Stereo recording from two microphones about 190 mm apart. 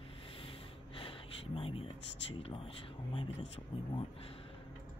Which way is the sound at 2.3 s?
30° left (ahead or behind).